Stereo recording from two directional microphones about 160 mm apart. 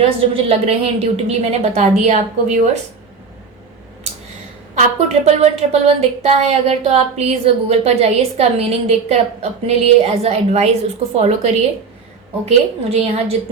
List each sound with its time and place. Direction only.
0.0 s a woman's voice: 35° right (ahead or behind)
4.7 s a woman's voice: 45° right (ahead or behind)